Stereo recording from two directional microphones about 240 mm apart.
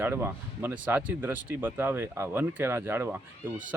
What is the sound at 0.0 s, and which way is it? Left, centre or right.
Speech, centre.